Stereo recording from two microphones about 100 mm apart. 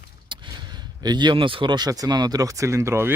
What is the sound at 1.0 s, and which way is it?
Speech, 45° right (ahead or behind).